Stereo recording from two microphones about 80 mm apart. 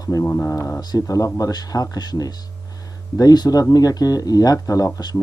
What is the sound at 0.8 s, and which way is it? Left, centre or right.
Speech, left.